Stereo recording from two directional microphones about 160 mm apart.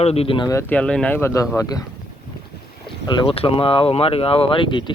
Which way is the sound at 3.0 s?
35° left (ahead or behind).